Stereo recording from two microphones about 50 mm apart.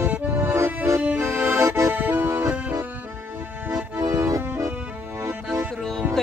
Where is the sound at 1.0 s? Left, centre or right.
Right.